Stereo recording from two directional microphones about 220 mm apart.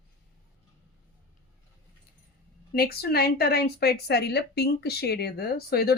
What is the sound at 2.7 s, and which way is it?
Speech, 45° left (ahead or behind).